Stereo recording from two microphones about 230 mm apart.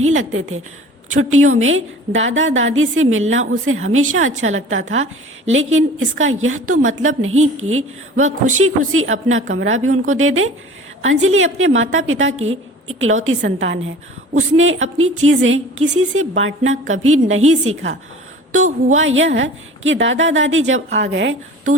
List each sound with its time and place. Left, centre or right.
0.0 s a woman's voice: right
18.9 s a woman's voice: right